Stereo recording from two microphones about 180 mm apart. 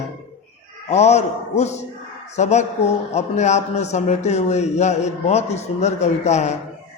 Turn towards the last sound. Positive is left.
turn(degrees=40)  # may be behind; listen again after turning